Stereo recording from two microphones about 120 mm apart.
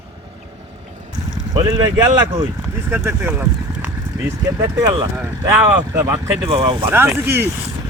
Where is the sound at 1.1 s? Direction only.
30° right (ahead or behind).